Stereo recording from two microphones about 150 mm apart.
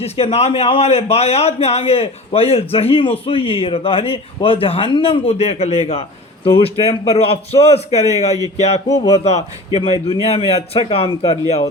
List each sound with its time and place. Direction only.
0.0 s a man's voice: 45° left (ahead or behind)